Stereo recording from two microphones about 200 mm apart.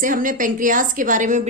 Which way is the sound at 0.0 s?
40° right (ahead or behind).